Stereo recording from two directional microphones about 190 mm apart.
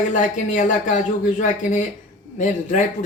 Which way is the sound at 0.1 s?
40° left (ahead or behind).